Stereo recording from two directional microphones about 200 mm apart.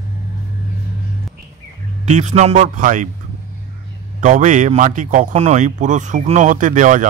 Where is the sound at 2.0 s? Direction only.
35° right (ahead or behind).